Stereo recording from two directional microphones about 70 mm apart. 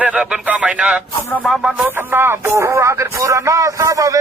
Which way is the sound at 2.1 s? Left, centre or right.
Right.